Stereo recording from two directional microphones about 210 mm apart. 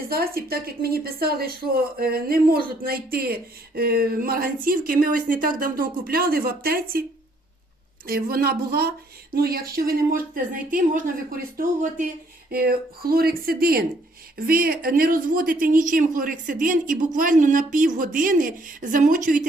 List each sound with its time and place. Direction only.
0.1 s speech: 45° right (ahead or behind)
8.0 s speech: 45° right (ahead or behind)